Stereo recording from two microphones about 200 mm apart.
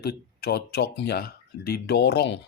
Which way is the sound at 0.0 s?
50° left (ahead or behind).